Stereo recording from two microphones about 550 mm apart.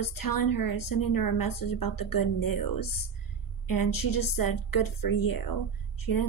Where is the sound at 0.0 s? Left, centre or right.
Left.